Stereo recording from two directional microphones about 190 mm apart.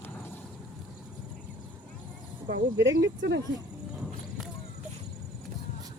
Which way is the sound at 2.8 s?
70° right (ahead or behind).